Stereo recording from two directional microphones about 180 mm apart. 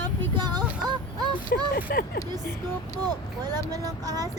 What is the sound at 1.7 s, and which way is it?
Speech, 55° left (ahead or behind).